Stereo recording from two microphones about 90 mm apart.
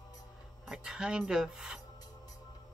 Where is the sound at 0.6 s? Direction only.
5° right (ahead or behind).